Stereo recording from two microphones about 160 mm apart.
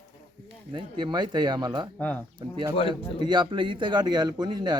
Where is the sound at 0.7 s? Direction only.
30° right (ahead or behind).